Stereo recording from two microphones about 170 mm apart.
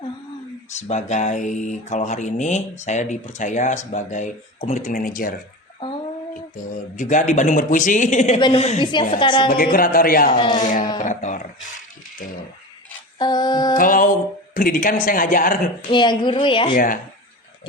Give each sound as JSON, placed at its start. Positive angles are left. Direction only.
{"t": 0.7, "sound": "speech", "side_deg": 40}
{"t": 6.9, "sound": "speech", "side_deg": 50}
{"t": 8.4, "sound": "a woman's voice", "side_deg": 25}
{"t": 9.7, "sound": "speech", "side_deg": 55}
{"t": 10.3, "sound": "a woman's voice", "side_deg": 30}
{"t": 10.6, "sound": "speech", "side_deg": 50}
{"t": 11.0, "sound": "a sound", "side_deg": 45}
{"t": 13.1, "sound": "a woman's voice", "side_deg": 25}
{"t": 13.7, "sound": "speech", "side_deg": 55}
{"t": 15.9, "sound": "a woman's voice", "side_deg": 25}
{"t": 16.7, "sound": "speech", "side_deg": 55}